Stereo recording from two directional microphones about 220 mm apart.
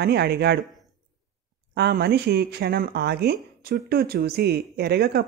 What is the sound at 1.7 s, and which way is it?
Speech, 50° right (ahead or behind).